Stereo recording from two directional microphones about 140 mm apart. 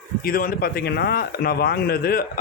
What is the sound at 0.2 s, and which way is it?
Speech, 90° left.